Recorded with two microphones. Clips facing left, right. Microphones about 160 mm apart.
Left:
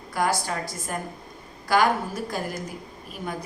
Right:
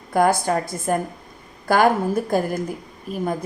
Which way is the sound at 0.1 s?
50° right (ahead or behind).